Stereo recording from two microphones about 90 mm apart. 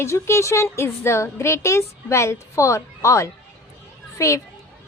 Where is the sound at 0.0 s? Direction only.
30° left (ahead or behind).